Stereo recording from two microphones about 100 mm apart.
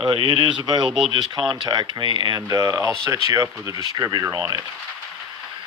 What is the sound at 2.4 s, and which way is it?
Speech, 35° right (ahead or behind).